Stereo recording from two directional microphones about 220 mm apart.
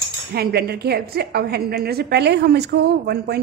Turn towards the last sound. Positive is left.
turn(degrees=-45)  # may be behind; listen again after turning